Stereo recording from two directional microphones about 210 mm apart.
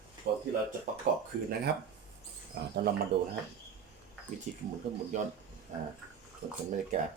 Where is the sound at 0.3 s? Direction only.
50° right (ahead or behind).